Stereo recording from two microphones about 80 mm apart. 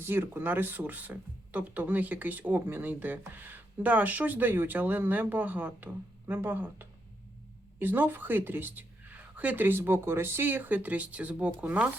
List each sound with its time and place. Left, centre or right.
0.0 s speech: right